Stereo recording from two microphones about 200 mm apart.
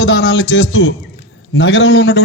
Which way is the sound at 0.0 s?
60° left (ahead or behind).